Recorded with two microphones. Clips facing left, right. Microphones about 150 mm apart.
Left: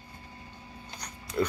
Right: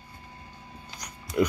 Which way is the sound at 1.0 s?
10° right (ahead or behind).